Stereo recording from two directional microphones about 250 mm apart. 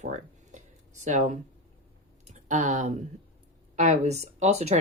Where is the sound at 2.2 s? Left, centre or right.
Right.